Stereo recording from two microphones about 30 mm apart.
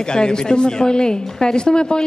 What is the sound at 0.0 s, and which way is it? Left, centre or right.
A woman's voice, left.